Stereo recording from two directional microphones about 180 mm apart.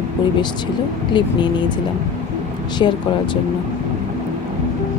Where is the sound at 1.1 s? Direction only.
25° left (ahead or behind).